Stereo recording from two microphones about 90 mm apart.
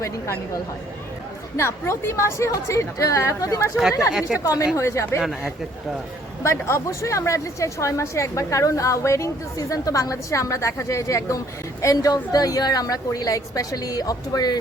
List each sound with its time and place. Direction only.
1.5 s a woman's voice: 30° left (ahead or behind)
4.1 s a woman's voice: 10° right (ahead or behind)
4.4 s a woman's voice: 35° left (ahead or behind)
5.2 s speech: 5° right (ahead or behind)
6.4 s a woman's voice: 30° left (ahead or behind)